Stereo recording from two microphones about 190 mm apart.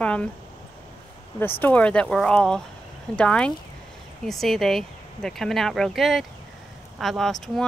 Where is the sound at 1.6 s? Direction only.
10° left (ahead or behind).